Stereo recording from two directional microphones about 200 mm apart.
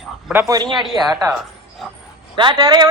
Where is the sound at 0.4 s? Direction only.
20° right (ahead or behind).